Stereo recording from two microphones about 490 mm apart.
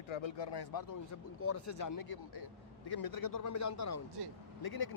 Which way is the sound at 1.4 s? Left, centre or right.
Left.